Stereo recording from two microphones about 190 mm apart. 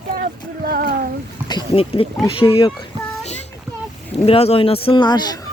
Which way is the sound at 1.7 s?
30° left (ahead or behind).